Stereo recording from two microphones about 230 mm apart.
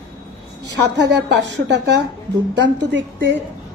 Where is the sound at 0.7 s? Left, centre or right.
Right.